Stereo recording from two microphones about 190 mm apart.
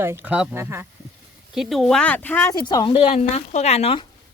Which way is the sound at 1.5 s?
Centre (ahead or behind).